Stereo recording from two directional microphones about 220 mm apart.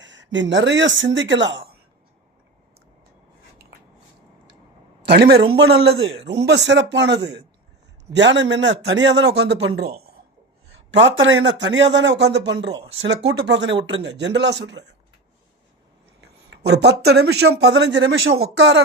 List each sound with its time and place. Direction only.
0.0 s speech: 55° right (ahead or behind)
5.1 s a man's voice: 45° right (ahead or behind)
16.2 s a man's voice: 50° right (ahead or behind)